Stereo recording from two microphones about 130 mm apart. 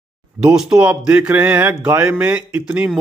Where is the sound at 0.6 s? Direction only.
10° right (ahead or behind).